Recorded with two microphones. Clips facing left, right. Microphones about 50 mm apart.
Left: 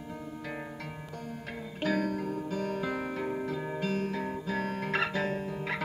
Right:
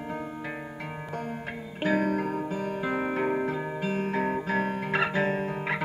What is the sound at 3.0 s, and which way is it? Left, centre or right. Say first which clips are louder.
Music: right 6 dB; right.